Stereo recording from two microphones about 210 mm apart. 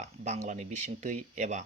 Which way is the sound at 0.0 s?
35° right (ahead or behind).